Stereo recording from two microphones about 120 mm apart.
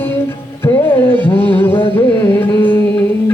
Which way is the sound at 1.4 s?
15° left (ahead or behind).